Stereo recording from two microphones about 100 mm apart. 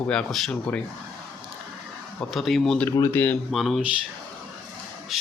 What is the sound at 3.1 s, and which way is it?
Speech, 20° left (ahead or behind).